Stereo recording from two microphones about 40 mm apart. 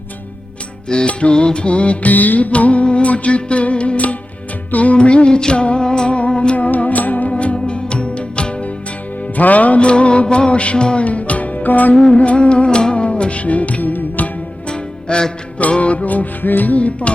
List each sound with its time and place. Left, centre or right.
0.9 s music: left
2.1 s music: left
6.7 s music: left
7.3 s music: left
9.3 s music: left
12.1 s music: left
14.7 s music: left
16.7 s music: left